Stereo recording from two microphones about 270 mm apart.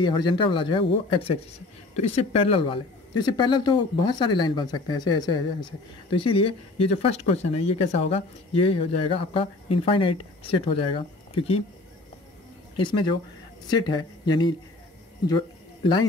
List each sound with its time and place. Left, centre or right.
0.0 s speech: centre
12.7 s speech: centre
15.8 s speech: centre